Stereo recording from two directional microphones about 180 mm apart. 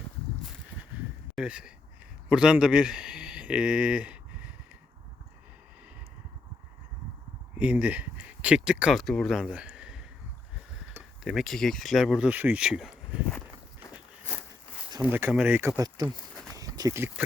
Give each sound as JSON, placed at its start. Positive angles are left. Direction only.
{"t": 1.4, "sound": "speech", "side_deg": -5}
{"t": 7.6, "sound": "speech", "side_deg": -10}
{"t": 11.2, "sound": "speech", "side_deg": 0}
{"t": 15.0, "sound": "speech", "side_deg": -10}
{"t": 15.7, "sound": "speech", "side_deg": -20}